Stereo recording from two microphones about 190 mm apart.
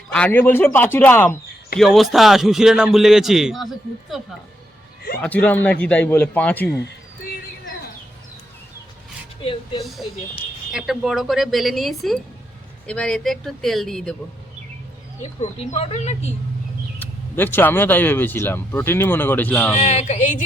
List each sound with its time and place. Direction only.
0.1 s speech: 5° left (ahead or behind)
1.8 s a man's voice: centre (ahead or behind)
5.2 s speech: 10° left (ahead or behind)
9.4 s speech: 25° left (ahead or behind)
10.7 s a man's voice: 5° right (ahead or behind)
15.2 s speech: 35° left (ahead or behind)
17.0 s speech: 10° left (ahead or behind)
19.7 s speech: 35° left (ahead or behind)